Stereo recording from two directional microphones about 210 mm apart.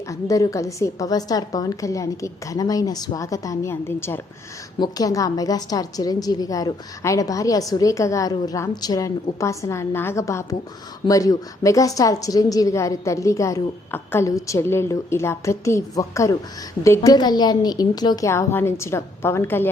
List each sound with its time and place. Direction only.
0.1 s a woman's voice: 15° left (ahead or behind)